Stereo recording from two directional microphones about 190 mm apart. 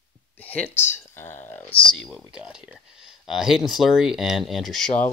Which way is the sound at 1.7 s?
25° left (ahead or behind).